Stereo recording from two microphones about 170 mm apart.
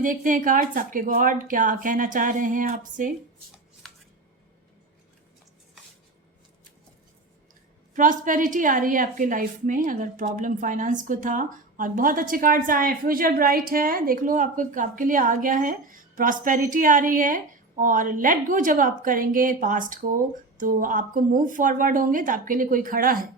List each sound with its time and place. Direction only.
0.0 s a woman's voice: 50° right (ahead or behind)
7.9 s a woman's voice: 50° right (ahead or behind)